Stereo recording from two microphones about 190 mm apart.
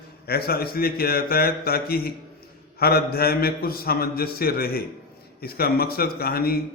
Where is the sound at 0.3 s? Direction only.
55° left (ahead or behind).